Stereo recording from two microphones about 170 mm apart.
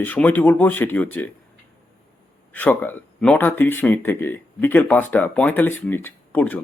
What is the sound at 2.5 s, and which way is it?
Speech, 10° left (ahead or behind).